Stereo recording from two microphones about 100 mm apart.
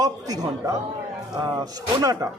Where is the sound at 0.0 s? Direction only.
35° right (ahead or behind).